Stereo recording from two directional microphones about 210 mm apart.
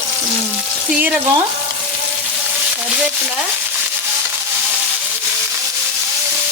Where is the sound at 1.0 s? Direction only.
10° right (ahead or behind).